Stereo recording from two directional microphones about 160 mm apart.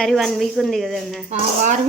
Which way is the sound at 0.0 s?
Centre (ahead or behind).